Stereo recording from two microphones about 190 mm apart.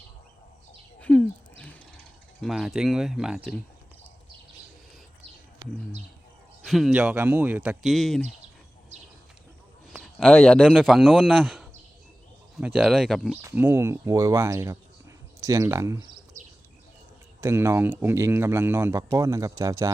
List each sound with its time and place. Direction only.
0.9 s a sound: 5° left (ahead or behind)
2.4 s speech: centre (ahead or behind)
6.7 s speech: centre (ahead or behind)
9.9 s a man's voice: centre (ahead or behind)
13.4 s speech: 10° right (ahead or behind)
16.4 s bird: 40° right (ahead or behind)
17.4 s speech: 15° right (ahead or behind)